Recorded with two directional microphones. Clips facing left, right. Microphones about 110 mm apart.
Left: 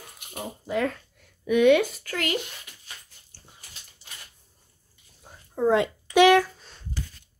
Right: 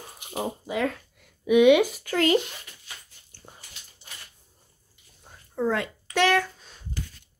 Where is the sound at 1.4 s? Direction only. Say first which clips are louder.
Right 2 dB; 15° right (ahead or behind).